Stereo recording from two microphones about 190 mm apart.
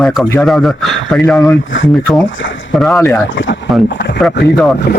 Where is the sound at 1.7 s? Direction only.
80° left.